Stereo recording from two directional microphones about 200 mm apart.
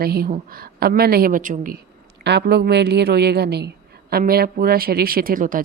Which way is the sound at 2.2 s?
55° right (ahead or behind).